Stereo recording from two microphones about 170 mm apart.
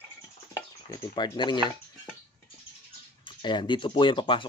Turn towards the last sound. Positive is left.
turn(degrees=30)  # may be behind; listen again after turning